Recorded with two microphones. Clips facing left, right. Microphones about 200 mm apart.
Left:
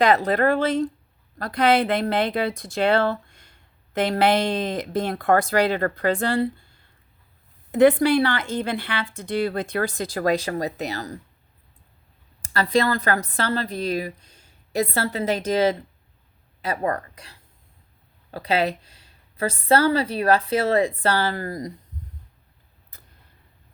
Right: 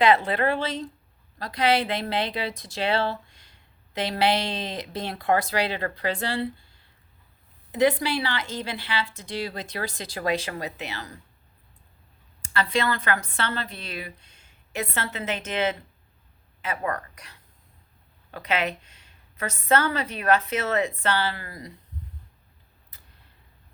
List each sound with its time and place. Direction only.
0.0 s a woman's voice: 40° left (ahead or behind)
7.7 s a woman's voice: 50° left (ahead or behind)
12.4 s a woman's voice: 40° left (ahead or behind)